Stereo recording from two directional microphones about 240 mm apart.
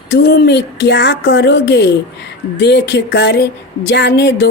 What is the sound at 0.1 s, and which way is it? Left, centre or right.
Speech, left.